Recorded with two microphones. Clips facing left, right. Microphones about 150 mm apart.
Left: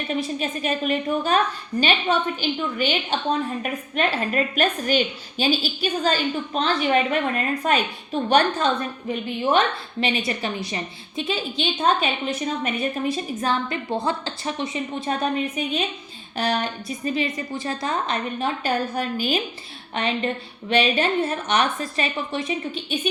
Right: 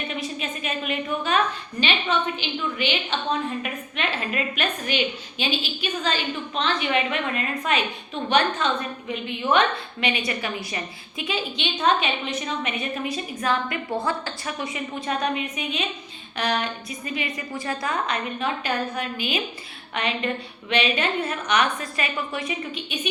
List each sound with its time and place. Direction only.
0.1 s a woman's voice: 40° left (ahead or behind)